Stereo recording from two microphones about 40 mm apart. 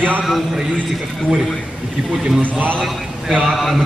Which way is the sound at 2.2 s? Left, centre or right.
Centre.